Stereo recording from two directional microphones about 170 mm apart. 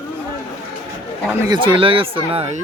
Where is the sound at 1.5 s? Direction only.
30° right (ahead or behind).